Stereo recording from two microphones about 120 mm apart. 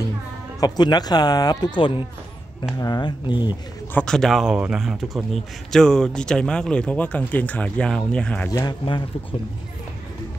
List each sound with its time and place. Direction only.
0.6 s speech: 35° left (ahead or behind)
2.8 s speech: 35° left (ahead or behind)
3.9 s speech: 5° left (ahead or behind)
8.6 s speech: 40° left (ahead or behind)